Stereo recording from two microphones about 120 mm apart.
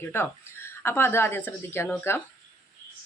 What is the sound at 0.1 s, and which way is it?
A woman's voice, 20° left (ahead or behind).